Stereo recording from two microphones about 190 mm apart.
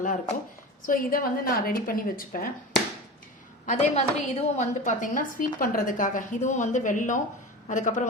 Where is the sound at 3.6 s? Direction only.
35° left (ahead or behind).